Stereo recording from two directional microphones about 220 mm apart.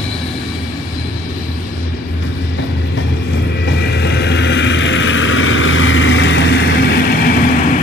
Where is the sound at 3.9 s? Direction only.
50° left (ahead or behind).